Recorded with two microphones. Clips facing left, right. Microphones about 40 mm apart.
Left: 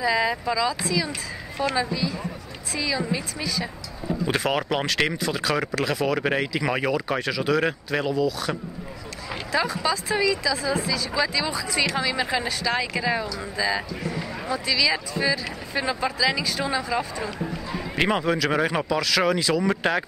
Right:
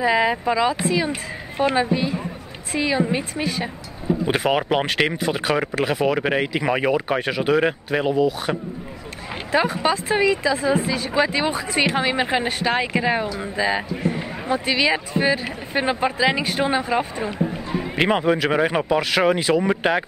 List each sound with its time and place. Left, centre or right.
0.0 s speech: right
4.3 s speech: right
7.6 s speech: centre
8.1 s speech: right
17.5 s speech: centre
18.9 s speech: right